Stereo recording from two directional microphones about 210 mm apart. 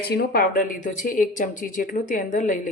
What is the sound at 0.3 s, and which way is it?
Speech, 40° left (ahead or behind).